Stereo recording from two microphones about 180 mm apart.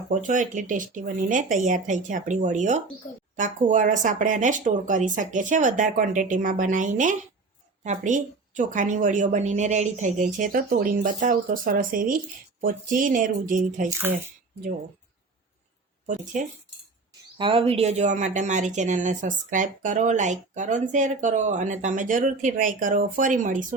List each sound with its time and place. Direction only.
0.1 s speech: 45° right (ahead or behind)
16.0 s speech: 45° right (ahead or behind)
17.3 s speech: 30° right (ahead or behind); by 23.6 s 45° right (ahead or behind)